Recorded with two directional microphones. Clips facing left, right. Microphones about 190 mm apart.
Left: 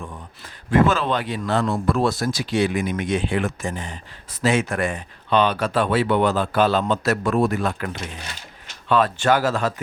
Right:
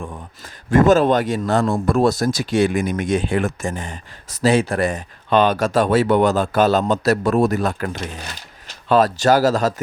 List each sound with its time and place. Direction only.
0.0 s a man's voice: 45° right (ahead or behind)
4.4 s a man's voice: 35° right (ahead or behind)